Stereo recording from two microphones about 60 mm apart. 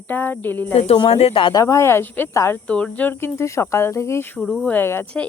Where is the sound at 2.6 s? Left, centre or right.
Left.